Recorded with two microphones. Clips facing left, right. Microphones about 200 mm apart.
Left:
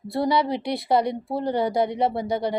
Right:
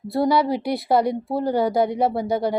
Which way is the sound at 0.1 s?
Centre (ahead or behind).